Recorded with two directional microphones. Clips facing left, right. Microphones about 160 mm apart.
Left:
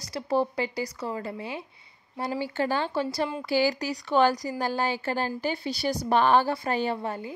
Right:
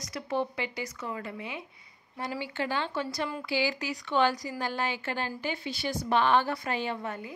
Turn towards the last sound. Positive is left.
turn(degrees=30)  # may be behind; listen again after turning